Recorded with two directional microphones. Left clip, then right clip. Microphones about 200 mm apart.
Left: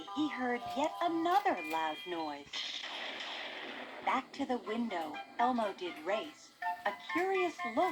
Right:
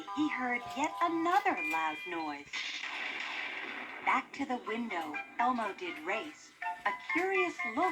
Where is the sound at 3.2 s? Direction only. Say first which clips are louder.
Right 4 dB; 35° left (ahead or behind).